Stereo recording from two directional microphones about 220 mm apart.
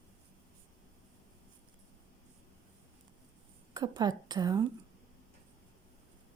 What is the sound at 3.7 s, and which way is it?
Speech, 20° right (ahead or behind).